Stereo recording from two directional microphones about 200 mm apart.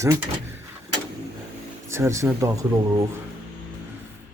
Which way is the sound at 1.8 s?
15° right (ahead or behind).